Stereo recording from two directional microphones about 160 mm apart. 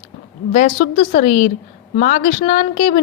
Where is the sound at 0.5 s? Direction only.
45° left (ahead or behind).